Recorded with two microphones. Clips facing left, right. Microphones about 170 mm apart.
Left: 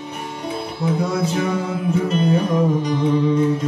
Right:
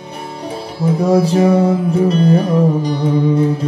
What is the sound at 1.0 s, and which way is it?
Music, 35° right (ahead or behind).